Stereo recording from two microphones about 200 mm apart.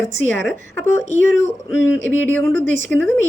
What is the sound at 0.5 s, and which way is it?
A woman's voice, 10° left (ahead or behind).